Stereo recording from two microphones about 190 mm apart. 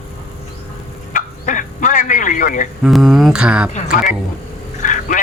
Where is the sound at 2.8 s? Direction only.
Centre (ahead or behind).